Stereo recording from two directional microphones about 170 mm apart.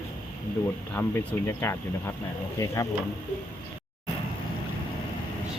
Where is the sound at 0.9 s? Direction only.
15° left (ahead or behind).